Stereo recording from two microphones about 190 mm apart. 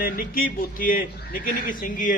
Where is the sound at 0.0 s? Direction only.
50° left (ahead or behind).